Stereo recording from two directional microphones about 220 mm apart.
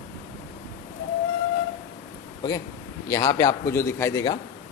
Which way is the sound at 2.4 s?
15° left (ahead or behind).